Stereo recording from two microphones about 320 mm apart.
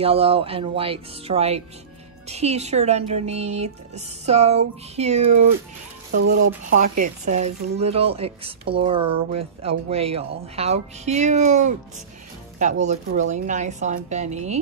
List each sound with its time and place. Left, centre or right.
0.0 s speech: centre
6.1 s speech: right
7.2 s speech: right
12.8 s speech: right